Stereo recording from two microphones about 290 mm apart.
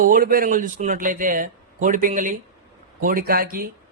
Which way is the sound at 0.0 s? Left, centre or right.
Right.